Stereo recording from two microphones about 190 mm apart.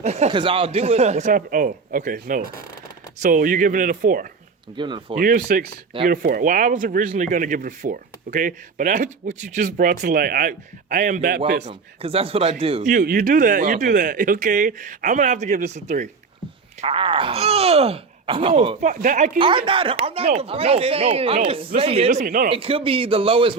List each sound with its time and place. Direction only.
0.0 s speech: 35° right (ahead or behind)
4.8 s a man's voice: 25° right (ahead or behind)
5.1 s speech: 50° right (ahead or behind)
11.6 s speech: 30° right (ahead or behind)
12.9 s speech: 50° right (ahead or behind)
16.8 s speech: 30° right (ahead or behind)
19.4 s speech: 25° right (ahead or behind); by 22.4 s 45° right (ahead or behind)
22.4 s a man's voice: 30° right (ahead or behind)